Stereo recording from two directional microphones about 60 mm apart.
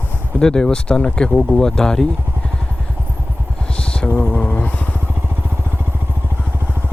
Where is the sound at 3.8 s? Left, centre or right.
Centre.